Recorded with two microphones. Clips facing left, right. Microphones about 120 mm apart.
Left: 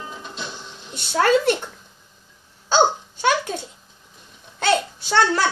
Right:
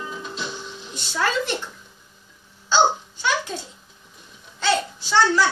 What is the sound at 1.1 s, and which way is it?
Speech, 55° left (ahead or behind).